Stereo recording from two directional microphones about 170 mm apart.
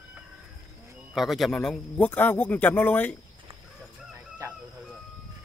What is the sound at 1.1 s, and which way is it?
Speech, centre (ahead or behind).